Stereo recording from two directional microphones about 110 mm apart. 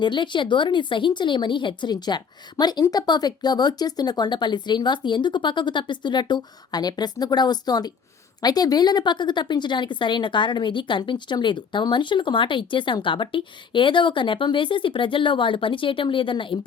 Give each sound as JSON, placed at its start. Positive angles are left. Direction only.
{"t": 0.0, "sound": "a woman's voice", "side_deg": 45}